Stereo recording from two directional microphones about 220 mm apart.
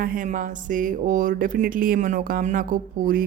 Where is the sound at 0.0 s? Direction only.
40° right (ahead or behind).